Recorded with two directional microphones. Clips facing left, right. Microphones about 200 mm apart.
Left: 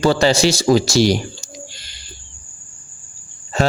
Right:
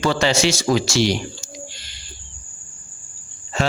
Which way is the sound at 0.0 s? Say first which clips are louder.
Left 4 dB; 35° left (ahead or behind).